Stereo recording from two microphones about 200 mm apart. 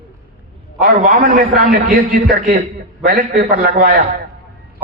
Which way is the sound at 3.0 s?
50° right (ahead or behind).